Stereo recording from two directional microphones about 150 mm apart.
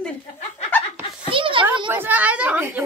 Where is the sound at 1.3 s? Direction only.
35° right (ahead or behind).